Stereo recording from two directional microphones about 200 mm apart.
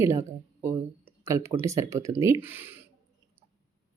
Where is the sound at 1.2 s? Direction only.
15° right (ahead or behind).